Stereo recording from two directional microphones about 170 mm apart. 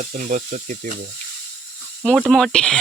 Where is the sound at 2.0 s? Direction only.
Centre (ahead or behind).